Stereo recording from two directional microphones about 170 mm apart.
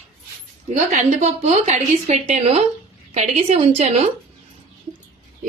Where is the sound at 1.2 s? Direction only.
40° right (ahead or behind).